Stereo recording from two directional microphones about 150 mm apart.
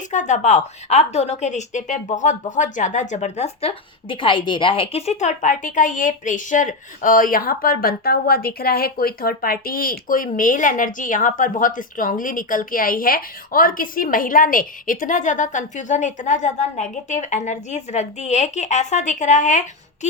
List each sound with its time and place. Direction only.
0.1 s a woman's voice: 55° left (ahead or behind)